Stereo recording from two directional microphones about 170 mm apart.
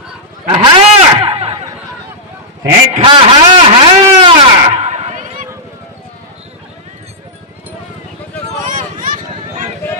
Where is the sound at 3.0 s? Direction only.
30° right (ahead or behind).